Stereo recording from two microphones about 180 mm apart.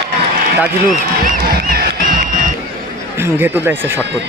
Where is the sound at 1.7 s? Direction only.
55° right (ahead or behind).